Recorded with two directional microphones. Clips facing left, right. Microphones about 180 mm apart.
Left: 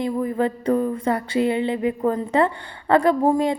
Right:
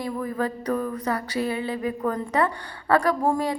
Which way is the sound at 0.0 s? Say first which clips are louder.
Left 5 dB; 20° left (ahead or behind).